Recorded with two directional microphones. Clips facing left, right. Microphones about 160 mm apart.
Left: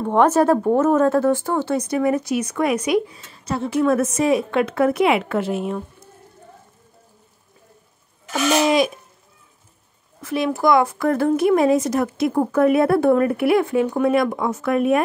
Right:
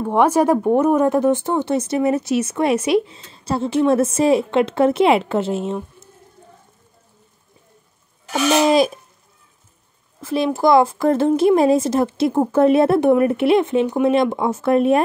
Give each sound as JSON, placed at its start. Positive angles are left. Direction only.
{"t": 0.0, "sound": "speech", "side_deg": -10}
{"t": 8.3, "sound": "a child's voice", "side_deg": -30}
{"t": 10.2, "sound": "speech", "side_deg": -30}